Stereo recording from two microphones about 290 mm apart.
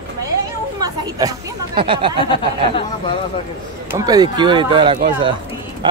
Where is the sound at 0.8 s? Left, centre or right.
Centre.